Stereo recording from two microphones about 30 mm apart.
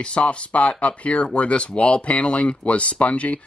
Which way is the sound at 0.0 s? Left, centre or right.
Left.